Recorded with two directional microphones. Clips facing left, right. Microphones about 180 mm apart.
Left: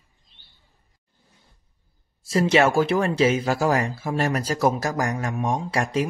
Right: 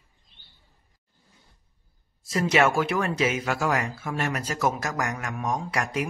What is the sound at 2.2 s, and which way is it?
Speech, 30° left (ahead or behind).